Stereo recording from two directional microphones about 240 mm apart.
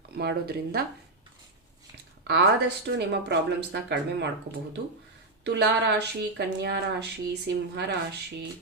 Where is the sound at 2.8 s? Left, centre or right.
Right.